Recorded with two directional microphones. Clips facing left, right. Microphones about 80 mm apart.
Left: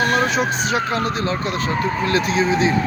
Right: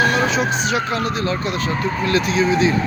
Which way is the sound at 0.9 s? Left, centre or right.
Left.